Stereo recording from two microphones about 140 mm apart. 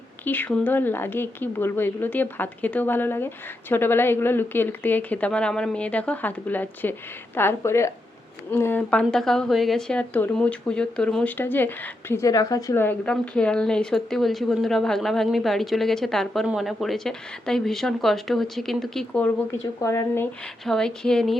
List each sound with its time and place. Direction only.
0.3 s speech: 10° left (ahead or behind)
8.9 s speech: 5° left (ahead or behind); by 12.8 s 25° left (ahead or behind)
12.8 s speech: 10° left (ahead or behind)
19.5 s speech: 20° left (ahead or behind)
20.7 s speech: 5° left (ahead or behind)